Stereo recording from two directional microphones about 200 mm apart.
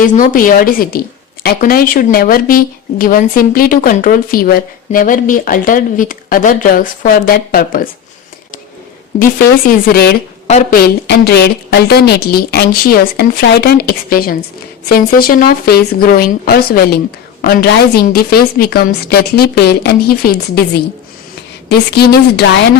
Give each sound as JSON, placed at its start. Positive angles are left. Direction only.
{"t": 0.0, "sound": "speech", "side_deg": 40}
{"t": 9.6, "sound": "speech", "side_deg": 50}
{"t": 10.4, "sound": "a woman's voice", "side_deg": 35}
{"t": 11.0, "sound": "speech", "side_deg": 55}